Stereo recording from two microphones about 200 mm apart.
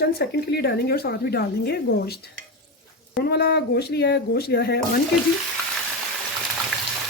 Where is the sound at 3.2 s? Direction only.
50° left (ahead or behind).